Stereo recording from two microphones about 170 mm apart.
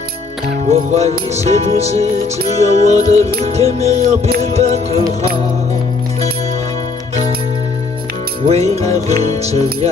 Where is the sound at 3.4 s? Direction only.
40° right (ahead or behind).